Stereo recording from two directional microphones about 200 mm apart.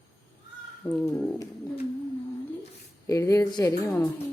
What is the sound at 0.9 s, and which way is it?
Speech, 10° left (ahead or behind).